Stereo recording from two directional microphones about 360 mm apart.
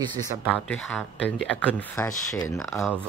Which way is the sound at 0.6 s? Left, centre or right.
Centre.